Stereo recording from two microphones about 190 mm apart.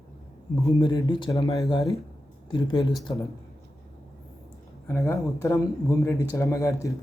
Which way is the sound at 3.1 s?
20° left (ahead or behind).